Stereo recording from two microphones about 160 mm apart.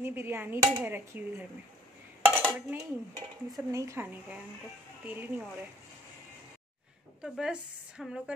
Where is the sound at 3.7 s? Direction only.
20° right (ahead or behind).